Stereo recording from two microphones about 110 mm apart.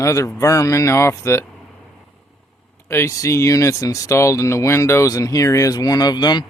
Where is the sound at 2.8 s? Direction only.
25° left (ahead or behind); by 6.4 s 40° left (ahead or behind).